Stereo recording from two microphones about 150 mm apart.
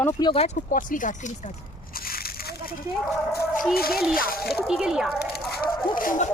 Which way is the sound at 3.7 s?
85° left.